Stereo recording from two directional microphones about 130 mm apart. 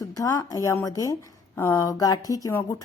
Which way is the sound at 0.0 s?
25° left (ahead or behind).